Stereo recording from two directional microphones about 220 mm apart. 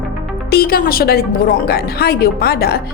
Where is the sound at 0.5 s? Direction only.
45° left (ahead or behind).